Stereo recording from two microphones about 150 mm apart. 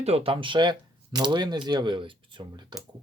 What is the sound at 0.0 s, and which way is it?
Speech, 40° right (ahead or behind).